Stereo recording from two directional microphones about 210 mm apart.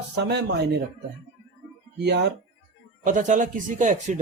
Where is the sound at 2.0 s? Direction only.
55° right (ahead or behind).